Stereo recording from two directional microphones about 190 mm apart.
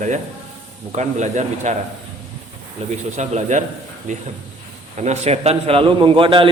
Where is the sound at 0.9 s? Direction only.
40° right (ahead or behind).